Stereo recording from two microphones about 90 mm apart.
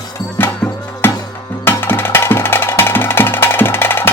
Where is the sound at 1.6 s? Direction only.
25° left (ahead or behind).